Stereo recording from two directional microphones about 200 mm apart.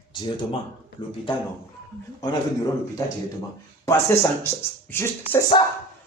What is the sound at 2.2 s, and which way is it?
Speech, 15° left (ahead or behind).